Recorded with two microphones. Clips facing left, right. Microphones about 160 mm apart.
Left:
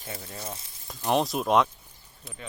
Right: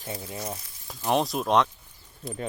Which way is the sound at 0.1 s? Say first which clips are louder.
Right 4 dB; 25° right (ahead or behind).